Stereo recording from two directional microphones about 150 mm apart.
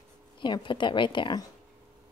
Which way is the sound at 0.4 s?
30° left (ahead or behind).